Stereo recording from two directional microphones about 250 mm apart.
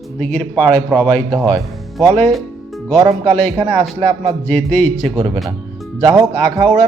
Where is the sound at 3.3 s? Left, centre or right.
Centre.